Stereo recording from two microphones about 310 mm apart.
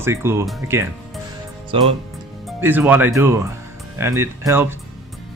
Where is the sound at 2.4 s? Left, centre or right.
Centre.